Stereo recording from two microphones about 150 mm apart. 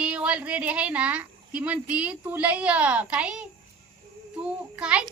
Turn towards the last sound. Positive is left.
turn(degrees=-5)  # may be behind; listen again after turning